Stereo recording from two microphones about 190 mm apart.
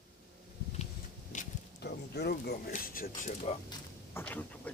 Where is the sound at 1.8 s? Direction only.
60° left (ahead or behind).